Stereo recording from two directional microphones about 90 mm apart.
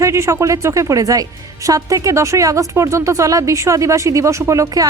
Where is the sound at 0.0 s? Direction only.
35° right (ahead or behind).